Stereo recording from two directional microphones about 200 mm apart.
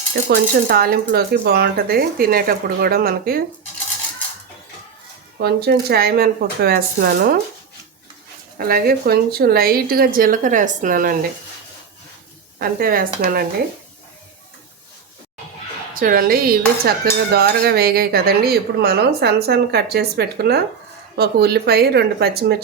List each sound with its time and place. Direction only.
0.3 s dishes: 50° right (ahead or behind)
5.4 s dishes: 50° right (ahead or behind)
8.5 s dishes: 50° right (ahead or behind)
12.5 s dishes: 45° right (ahead or behind)
16.0 s dishes: 45° right (ahead or behind)